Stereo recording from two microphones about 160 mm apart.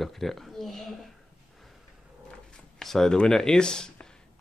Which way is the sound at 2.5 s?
5° left (ahead or behind).